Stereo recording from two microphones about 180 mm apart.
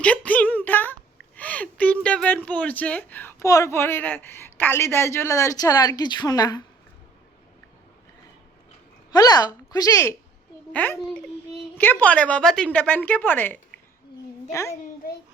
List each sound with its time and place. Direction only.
0.0 s a sound: 5° left (ahead or behind)
1.4 s speech: 10° left (ahead or behind)
9.1 s speech: 20° left (ahead or behind)